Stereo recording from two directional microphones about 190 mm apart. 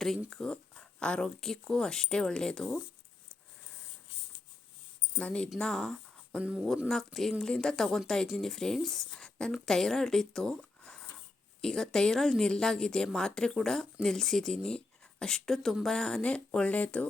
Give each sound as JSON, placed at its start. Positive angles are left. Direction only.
{"t": 0.0, "sound": "speech", "side_deg": 0}
{"t": 5.1, "sound": "speech", "side_deg": 5}